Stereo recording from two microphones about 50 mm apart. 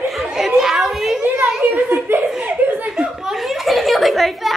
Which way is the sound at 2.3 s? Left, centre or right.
Right.